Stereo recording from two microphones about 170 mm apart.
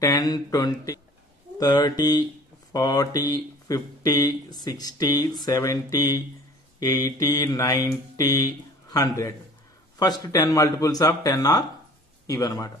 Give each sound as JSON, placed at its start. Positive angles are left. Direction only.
{"t": 0.0, "sound": "speech", "side_deg": 20}